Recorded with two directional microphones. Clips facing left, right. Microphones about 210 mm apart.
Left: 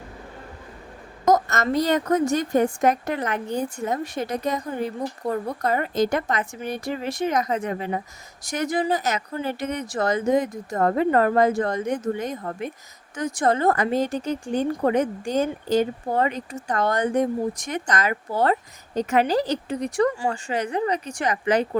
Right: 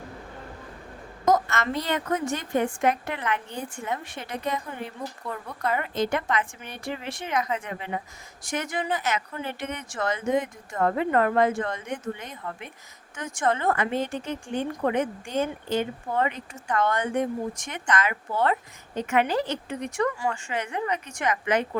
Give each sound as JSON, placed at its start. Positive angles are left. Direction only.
{"t": 1.3, "sound": "a woman's voice", "side_deg": 40}